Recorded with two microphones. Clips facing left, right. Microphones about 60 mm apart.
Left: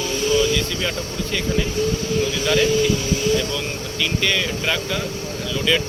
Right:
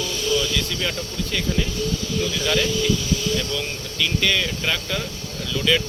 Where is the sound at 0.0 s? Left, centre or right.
Left.